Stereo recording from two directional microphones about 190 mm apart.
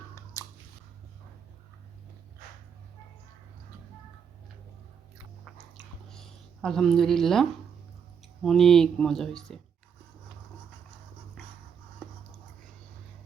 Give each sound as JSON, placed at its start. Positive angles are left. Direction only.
{"t": 0.4, "sound": "biting", "side_deg": 15}
{"t": 5.7, "sound": "drip", "side_deg": 0}
{"t": 8.4, "sound": "speech", "side_deg": 0}